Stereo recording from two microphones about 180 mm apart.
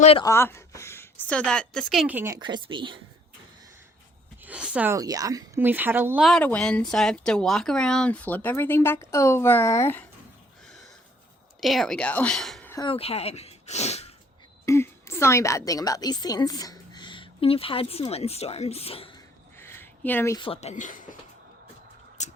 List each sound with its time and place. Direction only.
0.2 s a woman's voice: 15° left (ahead or behind); by 2.4 s 10° right (ahead or behind)
2.4 s a woman's voice: 25° right (ahead or behind)
4.4 s speech: 5° right (ahead or behind)
4.9 s speech: 20° right (ahead or behind)
6.2 s speech: 5° left (ahead or behind)
11.6 s a woman's voice: centre (ahead or behind)
12.7 s speech: 30° left (ahead or behind)
14.6 s a woman's voice: 15° left (ahead or behind); by 19.2 s 30° left (ahead or behind)
19.5 s a sound: 15° left (ahead or behind)
20.4 s speech: 35° left (ahead or behind)
22.2 s a sound: 40° left (ahead or behind)